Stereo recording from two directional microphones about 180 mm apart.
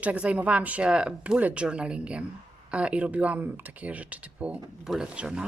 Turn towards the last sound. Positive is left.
turn(degrees=-5)  # may be behind; listen again after turning